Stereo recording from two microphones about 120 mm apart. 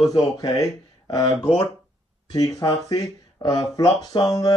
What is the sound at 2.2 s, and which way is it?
Speech, 30° left (ahead or behind).